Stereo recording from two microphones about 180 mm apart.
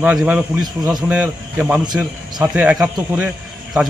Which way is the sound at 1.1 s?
10° right (ahead or behind).